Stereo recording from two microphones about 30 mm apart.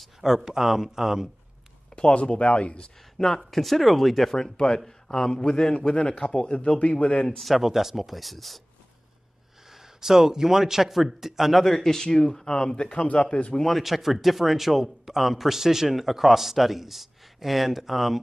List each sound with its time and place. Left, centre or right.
0.2 s a man's voice: centre
2.0 s speech: left
3.3 s a man's voice: centre
4.4 s a man's voice: left
5.9 s speech: left
7.2 s a man's voice: centre
7.6 s a man's voice: centre
9.7 s a man's voice: centre
11.6 s a man's voice: centre; by 13.0 s left
13.0 s speech: left
13.7 s a man's voice: centre